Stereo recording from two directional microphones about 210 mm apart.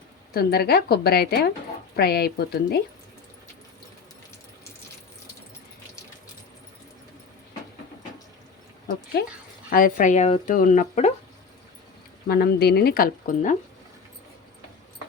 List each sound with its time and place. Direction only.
0.3 s speech: 45° left (ahead or behind)
9.2 s speech: 50° left (ahead or behind)
9.6 s speech: 40° left (ahead or behind)
12.3 s speech: 50° left (ahead or behind)